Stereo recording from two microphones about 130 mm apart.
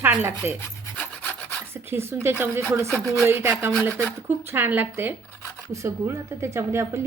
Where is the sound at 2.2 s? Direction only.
20° right (ahead or behind).